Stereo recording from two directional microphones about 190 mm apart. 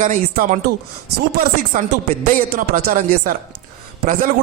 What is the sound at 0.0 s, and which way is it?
Speech, 40° right (ahead or behind).